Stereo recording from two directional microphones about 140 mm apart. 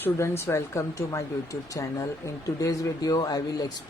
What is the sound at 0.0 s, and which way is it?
Speech, 15° left (ahead or behind).